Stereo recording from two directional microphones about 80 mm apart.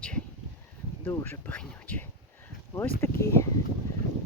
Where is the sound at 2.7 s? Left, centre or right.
Left.